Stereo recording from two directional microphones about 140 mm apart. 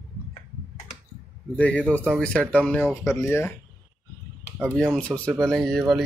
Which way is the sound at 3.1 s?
20° left (ahead or behind).